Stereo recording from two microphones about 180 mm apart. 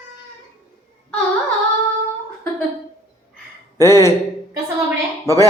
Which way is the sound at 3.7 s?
15° left (ahead or behind).